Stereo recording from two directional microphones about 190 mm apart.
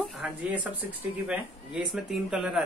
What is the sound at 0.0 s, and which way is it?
Speech, 5° right (ahead or behind).